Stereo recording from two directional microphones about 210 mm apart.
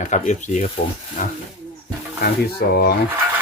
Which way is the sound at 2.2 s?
50° left (ahead or behind).